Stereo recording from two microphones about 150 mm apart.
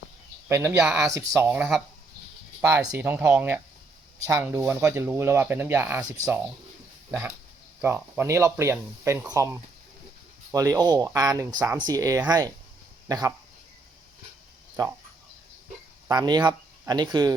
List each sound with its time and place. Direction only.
0.4 s speech: 15° right (ahead or behind)
7.1 s speech: 15° right (ahead or behind)
16.0 s speech: 25° right (ahead or behind)